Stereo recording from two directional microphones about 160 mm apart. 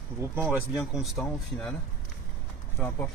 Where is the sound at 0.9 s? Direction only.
Centre (ahead or behind).